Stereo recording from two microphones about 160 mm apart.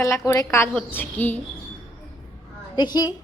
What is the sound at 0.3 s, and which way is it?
Speech, 15° left (ahead or behind).